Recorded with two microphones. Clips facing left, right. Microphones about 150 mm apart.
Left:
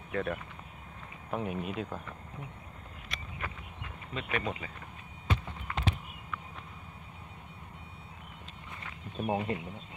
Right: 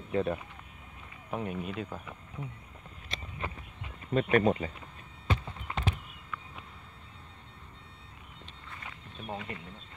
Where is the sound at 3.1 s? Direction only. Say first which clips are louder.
Right 3 dB; 25° right (ahead or behind).